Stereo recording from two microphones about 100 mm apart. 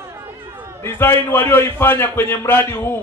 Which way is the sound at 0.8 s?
20° left (ahead or behind).